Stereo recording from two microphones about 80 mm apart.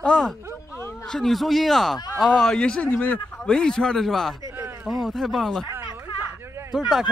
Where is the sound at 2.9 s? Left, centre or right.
Left.